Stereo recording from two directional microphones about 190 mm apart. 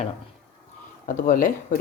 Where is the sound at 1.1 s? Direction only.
45° left (ahead or behind).